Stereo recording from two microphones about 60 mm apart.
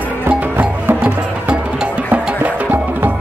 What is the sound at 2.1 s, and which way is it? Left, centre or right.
Music, right.